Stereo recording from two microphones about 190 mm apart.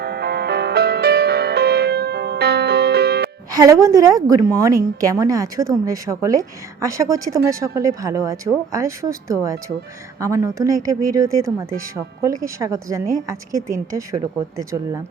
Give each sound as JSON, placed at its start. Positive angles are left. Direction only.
{"t": 0.0, "sound": "music", "side_deg": -60}
{"t": 3.5, "sound": "a woman's voice", "side_deg": -15}